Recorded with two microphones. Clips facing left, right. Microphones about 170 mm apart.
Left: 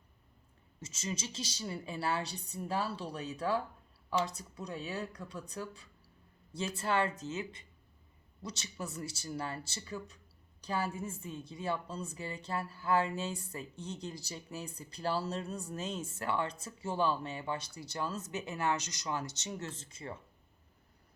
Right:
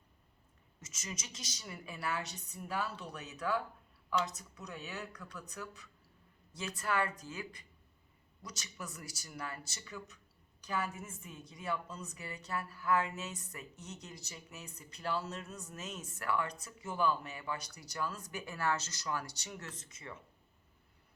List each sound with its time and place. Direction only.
0.8 s a woman's voice: 30° left (ahead or behind)